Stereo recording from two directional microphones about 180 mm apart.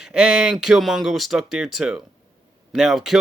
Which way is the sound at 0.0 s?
5° right (ahead or behind).